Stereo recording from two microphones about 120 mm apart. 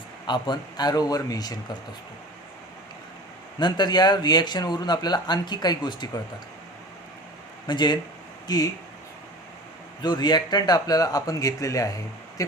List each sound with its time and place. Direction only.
0.3 s speech: 40° left (ahead or behind)
3.6 s speech: 40° left (ahead or behind)
7.7 s speech: 40° left (ahead or behind)
10.0 s speech: 35° left (ahead or behind)